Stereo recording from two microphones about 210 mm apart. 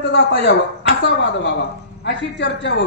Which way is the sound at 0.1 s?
55° left (ahead or behind).